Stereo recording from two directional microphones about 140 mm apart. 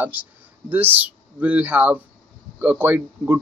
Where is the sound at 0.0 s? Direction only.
10° right (ahead or behind).